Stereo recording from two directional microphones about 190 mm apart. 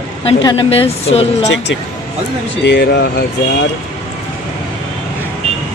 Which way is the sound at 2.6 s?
65° left (ahead or behind).